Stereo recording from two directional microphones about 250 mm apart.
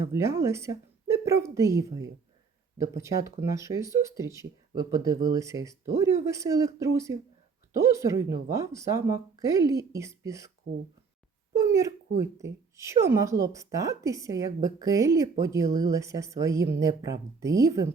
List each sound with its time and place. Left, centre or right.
0.1 s speech: centre
11.5 s speech: centre